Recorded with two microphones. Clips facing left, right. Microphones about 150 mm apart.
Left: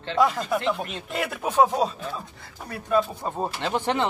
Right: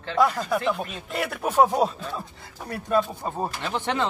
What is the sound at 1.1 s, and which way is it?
Speech, 10° left (ahead or behind).